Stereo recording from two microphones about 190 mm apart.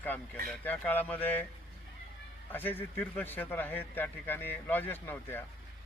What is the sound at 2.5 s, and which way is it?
Speech, 10° left (ahead or behind).